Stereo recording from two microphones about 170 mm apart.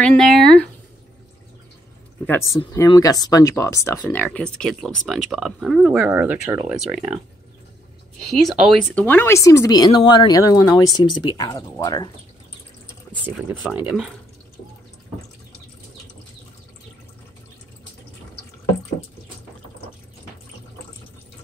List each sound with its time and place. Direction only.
0.0 s speech: 5° left (ahead or behind)
2.5 s speech: 20° left (ahead or behind); by 7.2 s 5° right (ahead or behind)
8.4 s speech: centre (ahead or behind)
9.0 s speech: 15° left (ahead or behind)
13.7 s speech: 5° right (ahead or behind)